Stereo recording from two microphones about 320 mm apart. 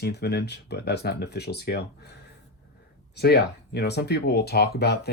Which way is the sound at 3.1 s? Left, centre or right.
Left.